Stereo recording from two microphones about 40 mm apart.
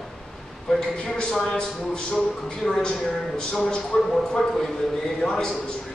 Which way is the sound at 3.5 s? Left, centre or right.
Left.